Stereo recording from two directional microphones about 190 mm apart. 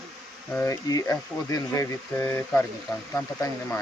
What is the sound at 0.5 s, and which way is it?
Speech, 15° left (ahead or behind).